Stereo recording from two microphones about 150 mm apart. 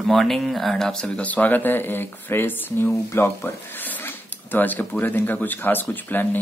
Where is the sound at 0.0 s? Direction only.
5° left (ahead or behind).